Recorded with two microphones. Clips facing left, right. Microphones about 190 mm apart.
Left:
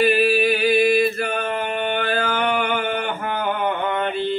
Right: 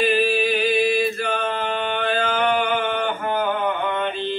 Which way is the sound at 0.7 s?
60° left (ahead or behind).